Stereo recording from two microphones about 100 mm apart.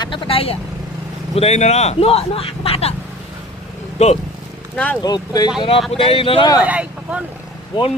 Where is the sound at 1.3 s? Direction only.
90° left.